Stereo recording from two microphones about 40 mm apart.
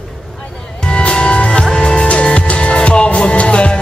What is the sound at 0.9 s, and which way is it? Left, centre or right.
Music, left.